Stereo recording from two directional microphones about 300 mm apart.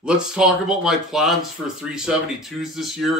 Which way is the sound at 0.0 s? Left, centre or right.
Centre.